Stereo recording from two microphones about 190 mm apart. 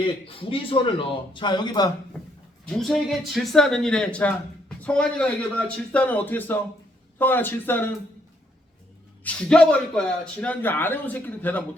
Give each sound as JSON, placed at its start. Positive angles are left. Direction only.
{"t": 0.3, "sound": "speech", "side_deg": 30}
{"t": 2.7, "sound": "a man's voice", "side_deg": 0}
{"t": 9.2, "sound": "a man's voice", "side_deg": 5}